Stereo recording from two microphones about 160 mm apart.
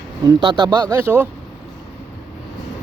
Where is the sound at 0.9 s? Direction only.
15° right (ahead or behind).